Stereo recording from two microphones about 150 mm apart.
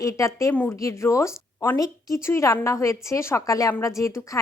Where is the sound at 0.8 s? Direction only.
20° left (ahead or behind).